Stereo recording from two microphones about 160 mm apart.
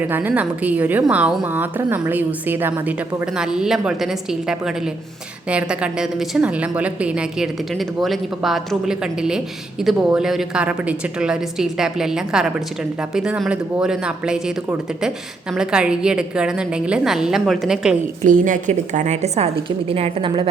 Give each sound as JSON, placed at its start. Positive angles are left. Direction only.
{"t": 0.1, "sound": "a woman's voice", "side_deg": -10}
{"t": 18.2, "sound": "a woman's voice", "side_deg": -55}